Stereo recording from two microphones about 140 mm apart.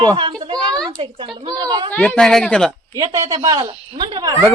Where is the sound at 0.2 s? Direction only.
35° right (ahead or behind).